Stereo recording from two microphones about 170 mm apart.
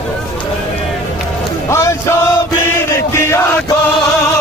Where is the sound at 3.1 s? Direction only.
15° left (ahead or behind).